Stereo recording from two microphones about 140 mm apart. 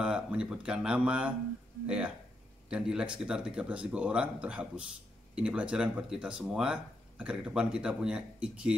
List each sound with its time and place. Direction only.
0.0 s speech: 5° right (ahead or behind)